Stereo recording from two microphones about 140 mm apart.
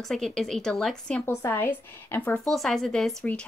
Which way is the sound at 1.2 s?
20° left (ahead or behind).